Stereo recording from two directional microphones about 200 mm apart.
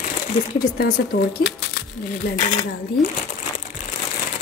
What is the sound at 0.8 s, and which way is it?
Speech, 50° left (ahead or behind).